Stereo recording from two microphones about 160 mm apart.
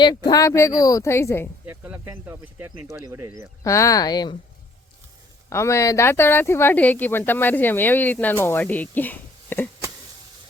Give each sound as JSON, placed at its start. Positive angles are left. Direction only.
{"t": 0.0, "sound": "speech", "side_deg": 25}
{"t": 1.6, "sound": "speech", "side_deg": -10}
{"t": 3.6, "sound": "speech", "side_deg": 20}
{"t": 5.5, "sound": "speech", "side_deg": 15}